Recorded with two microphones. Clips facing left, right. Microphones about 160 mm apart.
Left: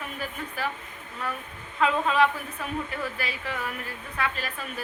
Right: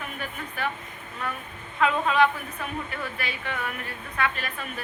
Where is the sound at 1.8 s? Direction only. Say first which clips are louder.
Right 1 dB; 30° left (ahead or behind).